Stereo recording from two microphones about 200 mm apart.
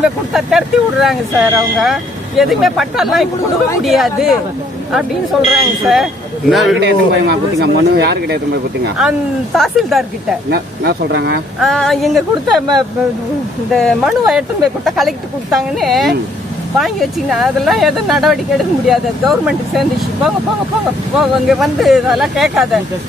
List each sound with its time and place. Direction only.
0.0 s speech: centre (ahead or behind)
5.5 s speech: centre (ahead or behind)
6.8 s speech: 60° right (ahead or behind)
8.9 s speech: centre (ahead or behind)
10.5 s speech: 55° right (ahead or behind)
11.6 s speech: centre (ahead or behind)
13.7 s speech: centre (ahead or behind)